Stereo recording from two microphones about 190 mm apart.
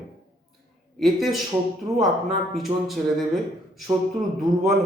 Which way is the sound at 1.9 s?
35° right (ahead or behind).